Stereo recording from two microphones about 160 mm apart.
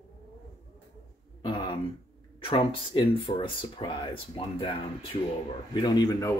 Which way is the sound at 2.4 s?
30° left (ahead or behind).